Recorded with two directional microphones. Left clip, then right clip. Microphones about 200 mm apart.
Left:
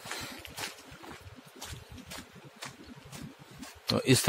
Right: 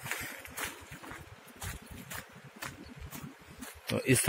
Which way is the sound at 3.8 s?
20° left (ahead or behind).